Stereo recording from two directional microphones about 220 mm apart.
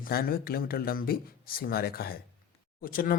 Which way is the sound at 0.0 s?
40° left (ahead or behind).